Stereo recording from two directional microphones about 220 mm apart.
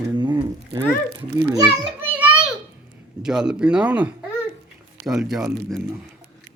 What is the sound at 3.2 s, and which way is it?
Speech, 5° right (ahead or behind).